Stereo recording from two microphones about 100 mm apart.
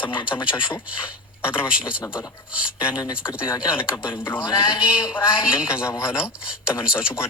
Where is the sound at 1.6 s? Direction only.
10° right (ahead or behind).